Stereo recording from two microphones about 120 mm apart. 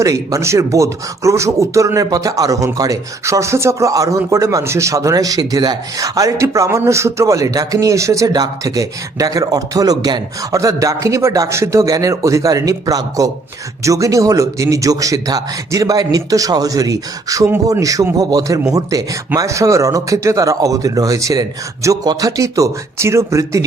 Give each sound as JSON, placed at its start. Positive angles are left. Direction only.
{"t": 0.0, "sound": "speech", "side_deg": -25}